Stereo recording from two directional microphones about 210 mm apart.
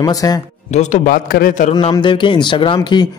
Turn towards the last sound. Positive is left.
turn(degrees=20)  # may be behind; listen again after turning